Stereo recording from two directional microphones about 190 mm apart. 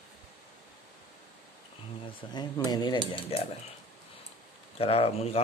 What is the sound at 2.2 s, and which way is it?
Speech, 20° left (ahead or behind).